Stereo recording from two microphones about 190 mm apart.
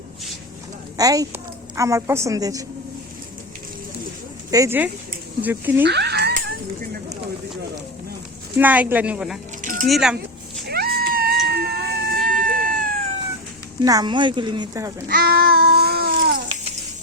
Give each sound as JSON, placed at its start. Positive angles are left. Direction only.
{"t": 0.9, "sound": "a woman's voice", "side_deg": -20}
{"t": 4.5, "sound": "a woman's voice", "side_deg": -15}
{"t": 5.8, "sound": "a sound", "side_deg": -60}
{"t": 8.5, "sound": "a woman's voice", "side_deg": -10}
{"t": 9.6, "sound": "music", "side_deg": -45}
{"t": 9.8, "sound": "speech", "side_deg": 0}
{"t": 10.7, "sound": "cat", "side_deg": -50}
{"t": 13.8, "sound": "speech", "side_deg": -20}
{"t": 15.0, "sound": "babbling", "side_deg": -55}